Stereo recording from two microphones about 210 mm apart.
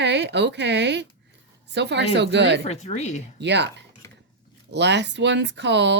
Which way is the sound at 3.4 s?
55° right (ahead or behind).